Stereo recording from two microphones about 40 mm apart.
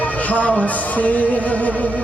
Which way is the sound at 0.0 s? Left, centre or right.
Left.